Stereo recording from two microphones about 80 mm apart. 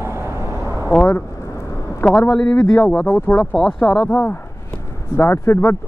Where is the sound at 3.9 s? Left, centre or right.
Centre.